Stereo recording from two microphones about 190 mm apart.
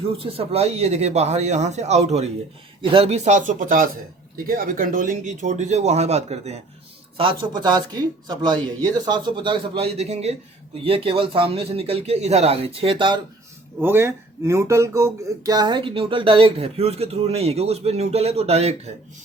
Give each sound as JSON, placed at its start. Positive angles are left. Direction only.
{"t": 0.0, "sound": "a man's voice", "side_deg": -30}
{"t": 13.8, "sound": "speech", "side_deg": -10}